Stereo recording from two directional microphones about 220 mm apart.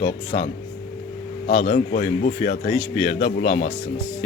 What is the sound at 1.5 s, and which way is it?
A man's voice, 25° left (ahead or behind).